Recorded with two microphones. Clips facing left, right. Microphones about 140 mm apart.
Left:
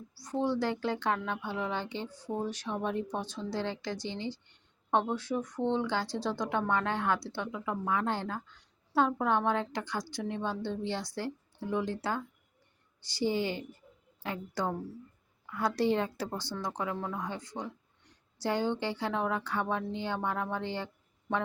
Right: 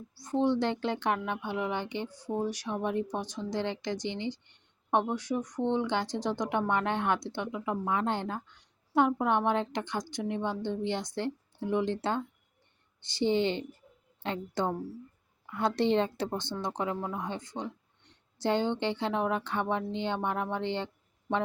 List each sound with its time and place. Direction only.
0.2 s speech: 20° right (ahead or behind)